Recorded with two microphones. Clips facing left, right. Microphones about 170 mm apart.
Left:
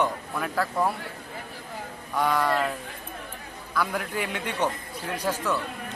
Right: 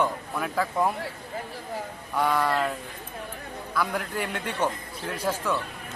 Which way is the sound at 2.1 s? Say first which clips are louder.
Even; 10° right (ahead or behind).